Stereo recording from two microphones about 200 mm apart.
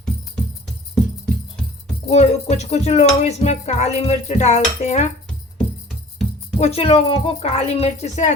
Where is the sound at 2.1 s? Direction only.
35° left (ahead or behind).